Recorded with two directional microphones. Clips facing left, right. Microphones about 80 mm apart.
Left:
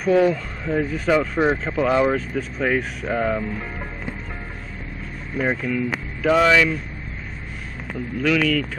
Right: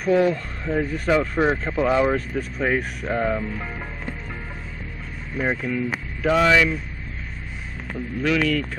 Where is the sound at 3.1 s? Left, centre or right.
Centre.